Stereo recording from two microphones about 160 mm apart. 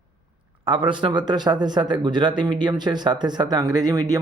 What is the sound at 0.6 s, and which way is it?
Speech, 30° right (ahead or behind).